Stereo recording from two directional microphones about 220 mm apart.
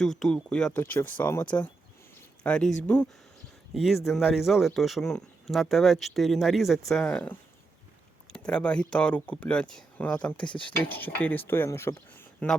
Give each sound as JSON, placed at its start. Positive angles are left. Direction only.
{"t": 0.0, "sound": "speech", "side_deg": 0}
{"t": 10.4, "sound": "speech", "side_deg": 20}
{"t": 10.9, "sound": "speech", "side_deg": 10}